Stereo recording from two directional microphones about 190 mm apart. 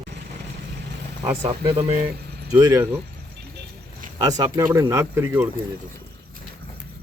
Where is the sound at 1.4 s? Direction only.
30° right (ahead or behind).